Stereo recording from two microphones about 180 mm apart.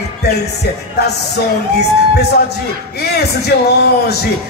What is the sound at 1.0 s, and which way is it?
Speech, 65° left (ahead or behind).